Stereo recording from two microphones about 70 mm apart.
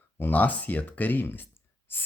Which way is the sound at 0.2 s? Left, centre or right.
Left.